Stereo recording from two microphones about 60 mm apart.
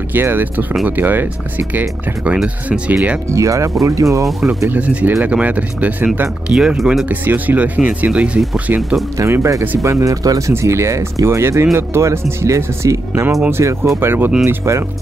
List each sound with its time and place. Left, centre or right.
0.1 s speech: right
3.3 s speech: right
4.6 s speech: right
6.5 s speech: centre
7.1 s speech: right
9.2 s speech: right
9.8 s speech: right
10.5 s speech: right